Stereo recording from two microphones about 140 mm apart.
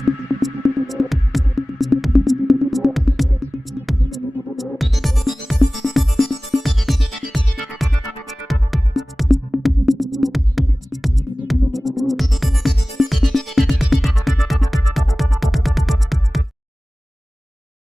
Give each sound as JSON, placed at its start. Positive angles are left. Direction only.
{"t": 0.0, "sound": "music", "side_deg": 0}